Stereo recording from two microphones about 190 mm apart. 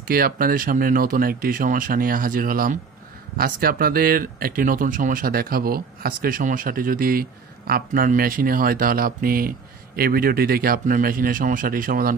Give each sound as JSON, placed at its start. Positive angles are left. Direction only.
{"t": 0.1, "sound": "speech", "side_deg": -50}